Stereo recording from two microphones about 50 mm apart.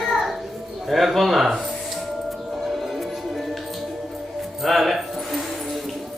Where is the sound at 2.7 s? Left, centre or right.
Centre.